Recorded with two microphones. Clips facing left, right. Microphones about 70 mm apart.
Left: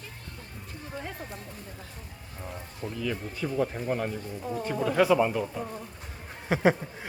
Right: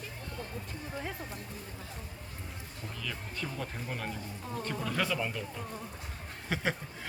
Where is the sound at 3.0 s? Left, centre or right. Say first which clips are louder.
Left 7 dB; centre.